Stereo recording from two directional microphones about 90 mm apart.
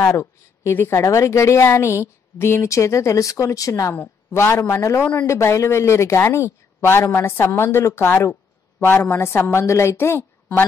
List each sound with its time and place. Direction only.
0.1 s a woman's voice: 30° left (ahead or behind)
3.9 s a man's voice: 25° left (ahead or behind)